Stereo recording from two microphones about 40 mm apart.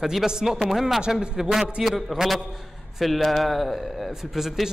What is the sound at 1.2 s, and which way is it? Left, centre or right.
Speech, centre.